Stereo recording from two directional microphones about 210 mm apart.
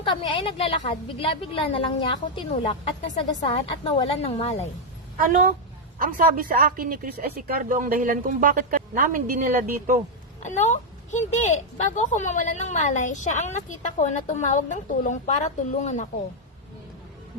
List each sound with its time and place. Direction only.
0.0 s a woman's voice: 25° left (ahead or behind)
5.1 s speech: 40° right (ahead or behind)
10.4 s a woman's voice: 35° left (ahead or behind)